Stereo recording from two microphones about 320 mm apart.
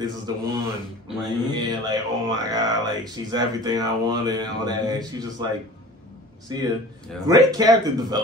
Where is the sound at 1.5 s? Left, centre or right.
Centre.